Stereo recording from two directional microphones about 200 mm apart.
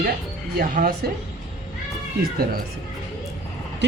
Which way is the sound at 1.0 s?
50° right (ahead or behind).